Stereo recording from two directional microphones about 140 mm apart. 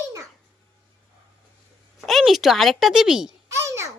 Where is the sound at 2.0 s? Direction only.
Centre (ahead or behind).